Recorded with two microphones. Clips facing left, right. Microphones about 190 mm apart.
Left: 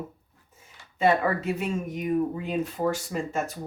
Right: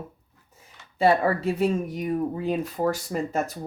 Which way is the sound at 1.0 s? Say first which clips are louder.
Right 2 dB; 35° right (ahead or behind).